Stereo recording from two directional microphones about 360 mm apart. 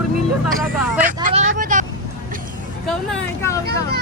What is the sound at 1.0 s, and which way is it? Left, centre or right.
Vehicle, centre.